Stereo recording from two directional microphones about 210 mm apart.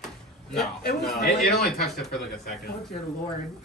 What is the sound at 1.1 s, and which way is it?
Speech, 50° left (ahead or behind).